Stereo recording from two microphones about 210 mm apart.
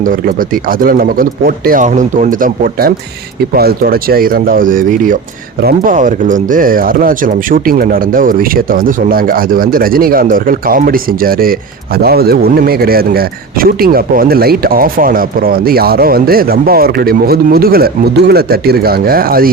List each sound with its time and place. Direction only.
0.8 s speech: 45° right (ahead or behind)